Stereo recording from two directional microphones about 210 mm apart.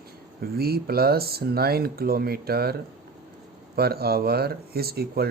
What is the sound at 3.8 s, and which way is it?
Speech, 45° right (ahead or behind).